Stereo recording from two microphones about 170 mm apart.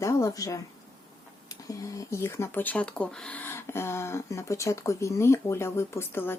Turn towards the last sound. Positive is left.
turn(degrees=15)  # may be behind; listen again after turning